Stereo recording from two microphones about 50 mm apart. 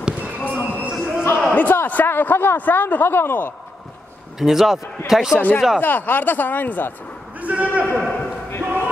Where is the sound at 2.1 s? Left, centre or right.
Left.